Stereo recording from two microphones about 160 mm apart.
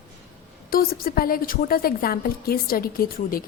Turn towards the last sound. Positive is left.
turn(degrees=65)  # may be behind; listen again after turning